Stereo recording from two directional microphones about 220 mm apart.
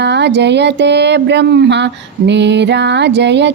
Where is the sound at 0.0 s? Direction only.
50° right (ahead or behind).